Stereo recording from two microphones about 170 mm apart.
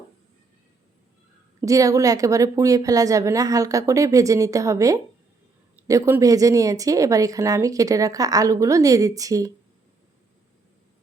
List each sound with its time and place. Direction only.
1.6 s speech: 20° right (ahead or behind)